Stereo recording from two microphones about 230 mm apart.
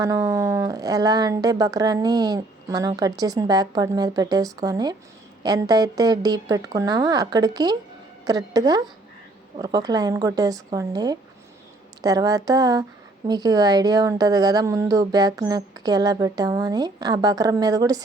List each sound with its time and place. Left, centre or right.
0.0 s a woman's voice: centre